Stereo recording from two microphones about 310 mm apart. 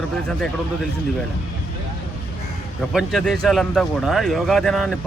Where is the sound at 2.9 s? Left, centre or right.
Centre.